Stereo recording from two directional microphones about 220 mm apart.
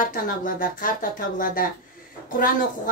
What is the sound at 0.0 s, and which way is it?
A woman's voice, 40° left (ahead or behind).